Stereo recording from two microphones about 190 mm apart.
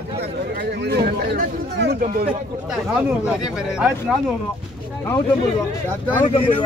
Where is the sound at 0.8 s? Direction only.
60° right (ahead or behind).